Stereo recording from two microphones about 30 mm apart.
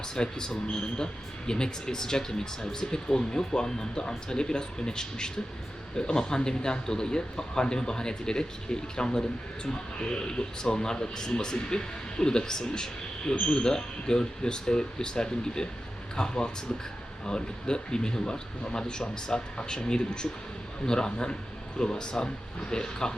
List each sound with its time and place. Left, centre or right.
0.2 s speech: left